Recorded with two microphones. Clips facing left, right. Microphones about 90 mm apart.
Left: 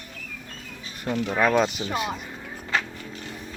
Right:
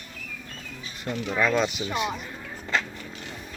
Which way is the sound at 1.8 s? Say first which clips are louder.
Even; 35° left (ahead or behind).